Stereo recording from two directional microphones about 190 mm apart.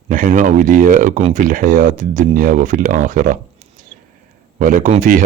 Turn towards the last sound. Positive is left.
turn(degrees=-45)  # may be behind; listen again after turning